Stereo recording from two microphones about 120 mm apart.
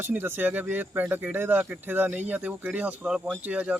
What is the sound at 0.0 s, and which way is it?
A man's voice, 15° right (ahead or behind).